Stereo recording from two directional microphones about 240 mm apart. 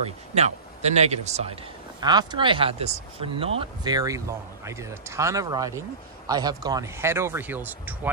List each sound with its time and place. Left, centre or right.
0.3 s a man's voice: right; by 8.1 s centre